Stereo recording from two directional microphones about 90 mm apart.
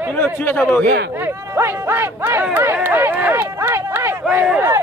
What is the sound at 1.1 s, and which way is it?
Speech, 25° right (ahead or behind).